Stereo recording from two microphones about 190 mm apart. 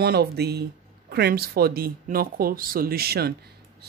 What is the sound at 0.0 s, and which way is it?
Speech, 55° right (ahead or behind).